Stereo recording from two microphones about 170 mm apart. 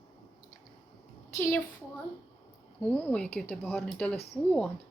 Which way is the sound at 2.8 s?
10° left (ahead or behind).